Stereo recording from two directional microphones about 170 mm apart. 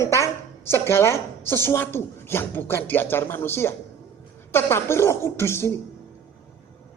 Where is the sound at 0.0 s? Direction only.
15° left (ahead or behind).